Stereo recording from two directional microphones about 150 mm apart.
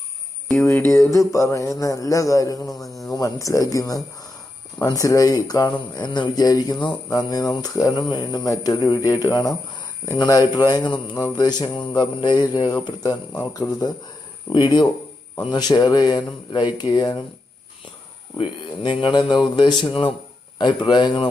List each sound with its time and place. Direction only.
0.5 s jingle bell: 15° left (ahead or behind)
1.3 s speech: 20° left (ahead or behind)
18.3 s speech: 35° left (ahead or behind)